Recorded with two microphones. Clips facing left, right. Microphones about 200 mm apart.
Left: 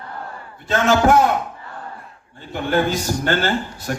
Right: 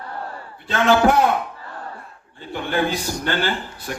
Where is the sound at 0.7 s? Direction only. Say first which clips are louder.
Left 1 dB; 45° left (ahead or behind).